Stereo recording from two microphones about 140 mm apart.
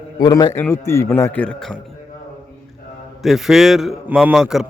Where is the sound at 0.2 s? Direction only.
25° left (ahead or behind); by 1.7 s 5° left (ahead or behind).